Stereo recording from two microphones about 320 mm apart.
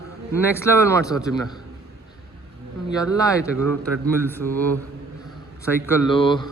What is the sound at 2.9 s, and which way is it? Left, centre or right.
A man's voice, centre.